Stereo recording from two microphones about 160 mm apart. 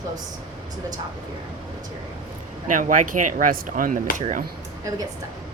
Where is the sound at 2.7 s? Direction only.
55° right (ahead or behind).